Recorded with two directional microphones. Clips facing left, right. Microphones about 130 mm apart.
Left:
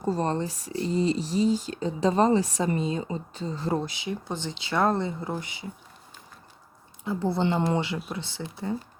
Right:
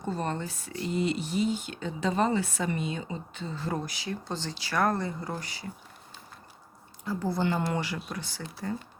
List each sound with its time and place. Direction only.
0.0 s speech: 35° left (ahead or behind); by 5.7 s 20° left (ahead or behind)
7.0 s speech: 25° left (ahead or behind)